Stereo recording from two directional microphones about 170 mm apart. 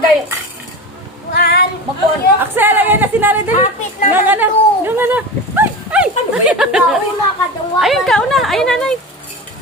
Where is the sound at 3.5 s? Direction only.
45° left (ahead or behind).